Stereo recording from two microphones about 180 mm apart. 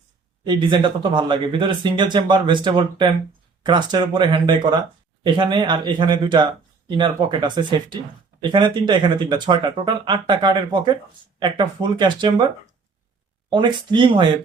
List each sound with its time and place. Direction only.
0.4 s speech: 25° right (ahead or behind)
13.5 s speech: 25° right (ahead or behind)